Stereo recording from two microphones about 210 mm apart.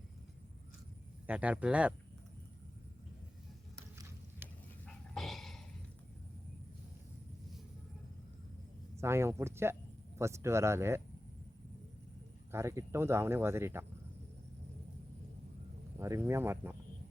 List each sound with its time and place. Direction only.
1.3 s speech: 5° right (ahead or behind)
4.9 s dog: centre (ahead or behind)
9.0 s speech: 10° right (ahead or behind)
12.5 s speech: 15° right (ahead or behind)
16.0 s speech: 15° right (ahead or behind)